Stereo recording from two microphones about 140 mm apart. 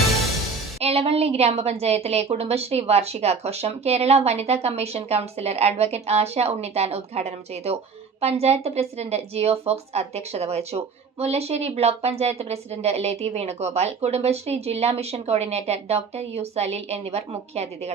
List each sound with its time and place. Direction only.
0.8 s speech: 45° right (ahead or behind)